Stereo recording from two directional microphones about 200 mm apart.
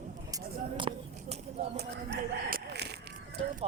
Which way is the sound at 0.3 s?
20° right (ahead or behind).